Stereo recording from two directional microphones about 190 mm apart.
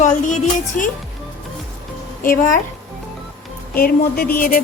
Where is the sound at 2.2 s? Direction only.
45° left (ahead or behind).